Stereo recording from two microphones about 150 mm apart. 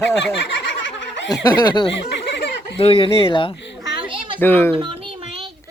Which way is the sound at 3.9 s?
35° right (ahead or behind).